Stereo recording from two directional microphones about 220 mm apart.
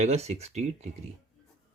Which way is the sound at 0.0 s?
30° right (ahead or behind).